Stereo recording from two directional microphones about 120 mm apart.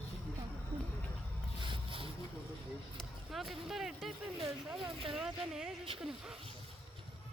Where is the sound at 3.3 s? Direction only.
Centre (ahead or behind).